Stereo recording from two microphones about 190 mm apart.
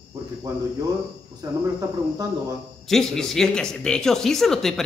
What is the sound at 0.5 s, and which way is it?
Speech, 20° right (ahead or behind).